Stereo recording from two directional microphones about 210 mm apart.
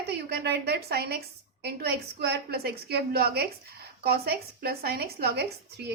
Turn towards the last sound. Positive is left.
turn(degrees=-50)  # may be behind; listen again after turning